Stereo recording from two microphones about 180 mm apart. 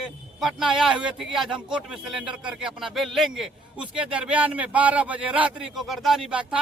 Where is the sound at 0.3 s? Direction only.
Centre (ahead or behind).